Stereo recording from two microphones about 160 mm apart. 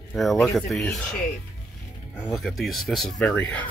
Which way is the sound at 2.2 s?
Centre (ahead or behind).